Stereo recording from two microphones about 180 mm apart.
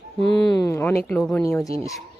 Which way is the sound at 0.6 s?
15° left (ahead or behind).